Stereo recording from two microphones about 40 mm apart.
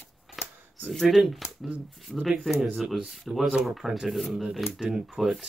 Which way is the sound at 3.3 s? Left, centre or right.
Centre.